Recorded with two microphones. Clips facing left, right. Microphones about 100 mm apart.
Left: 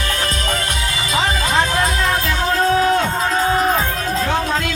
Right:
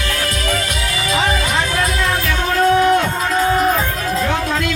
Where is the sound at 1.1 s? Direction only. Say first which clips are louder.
Even; 25° left (ahead or behind).